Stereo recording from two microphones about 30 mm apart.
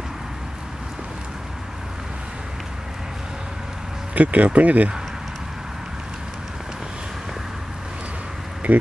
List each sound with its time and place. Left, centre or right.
4.1 s speech: right
8.7 s speech: right